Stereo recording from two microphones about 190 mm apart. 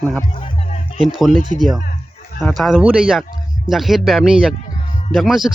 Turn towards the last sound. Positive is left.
turn(degrees=0)  # may be behind; listen again after turning